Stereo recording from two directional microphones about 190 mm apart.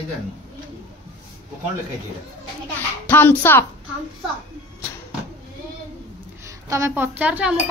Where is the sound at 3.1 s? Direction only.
10° left (ahead or behind).